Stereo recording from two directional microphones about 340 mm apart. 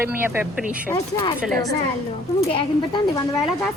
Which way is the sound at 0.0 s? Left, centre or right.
Centre.